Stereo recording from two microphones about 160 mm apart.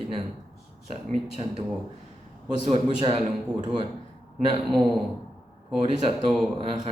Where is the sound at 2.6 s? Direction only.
35° right (ahead or behind).